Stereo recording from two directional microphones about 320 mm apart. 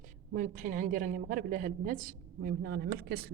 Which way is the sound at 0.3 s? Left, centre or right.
Right.